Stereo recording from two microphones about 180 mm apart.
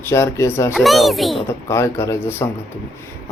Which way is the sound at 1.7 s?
15° left (ahead or behind).